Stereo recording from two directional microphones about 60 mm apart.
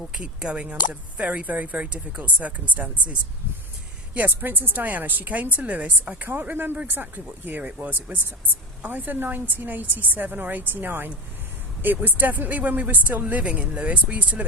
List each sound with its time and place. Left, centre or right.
0.1 s a woman's voice: centre